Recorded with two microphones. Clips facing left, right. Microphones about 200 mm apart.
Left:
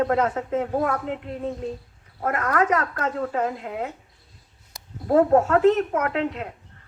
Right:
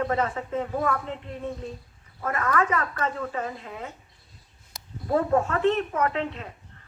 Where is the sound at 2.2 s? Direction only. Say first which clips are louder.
Left 3 dB; 65° left (ahead or behind).